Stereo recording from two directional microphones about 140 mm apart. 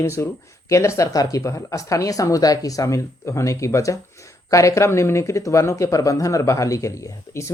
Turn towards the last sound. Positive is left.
turn(degrees=25)  # may be behind; listen again after turning